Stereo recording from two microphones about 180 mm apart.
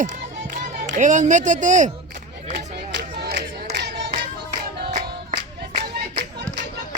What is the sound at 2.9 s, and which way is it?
Crowd, 65° right (ahead or behind).